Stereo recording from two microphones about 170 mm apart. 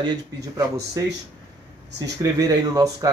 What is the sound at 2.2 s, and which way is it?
Speech, 20° right (ahead or behind).